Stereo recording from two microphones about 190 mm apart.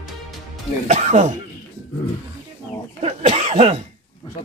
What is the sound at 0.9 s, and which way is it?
Speech, 40° right (ahead or behind).